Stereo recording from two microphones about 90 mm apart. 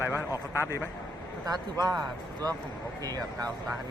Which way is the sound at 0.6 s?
30° left (ahead or behind).